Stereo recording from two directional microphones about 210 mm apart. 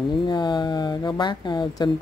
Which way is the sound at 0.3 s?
20° left (ahead or behind).